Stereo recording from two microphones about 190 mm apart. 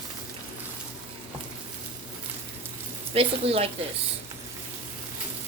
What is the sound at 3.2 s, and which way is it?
Speech, 30° right (ahead or behind).